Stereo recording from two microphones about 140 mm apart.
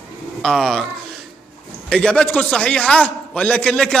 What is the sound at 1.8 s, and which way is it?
A man's voice, 5° left (ahead or behind).